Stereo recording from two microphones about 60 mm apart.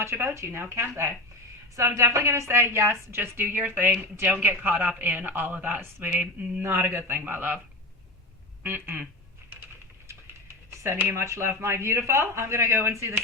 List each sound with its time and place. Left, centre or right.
0.0 s a woman's voice: right
8.6 s speech: right
11.1 s a woman's voice: right